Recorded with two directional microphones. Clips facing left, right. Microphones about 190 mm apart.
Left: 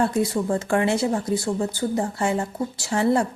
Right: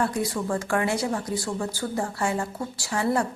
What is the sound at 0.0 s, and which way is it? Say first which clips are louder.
Speech: left 4 dB; 25° left (ahead or behind).